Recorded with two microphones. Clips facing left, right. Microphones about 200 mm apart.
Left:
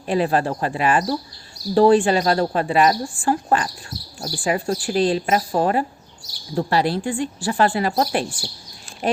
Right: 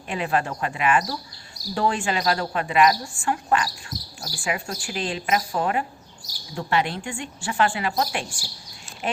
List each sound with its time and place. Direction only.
0.1 s a woman's voice: 35° left (ahead or behind)